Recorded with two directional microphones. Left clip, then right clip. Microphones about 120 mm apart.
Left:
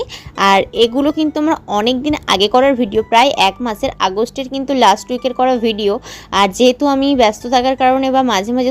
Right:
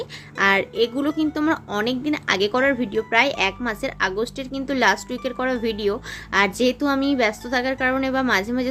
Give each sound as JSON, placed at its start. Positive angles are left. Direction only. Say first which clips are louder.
{"t": 0.0, "sound": "a woman's voice", "louder": "left 6 dB", "side_deg": 55}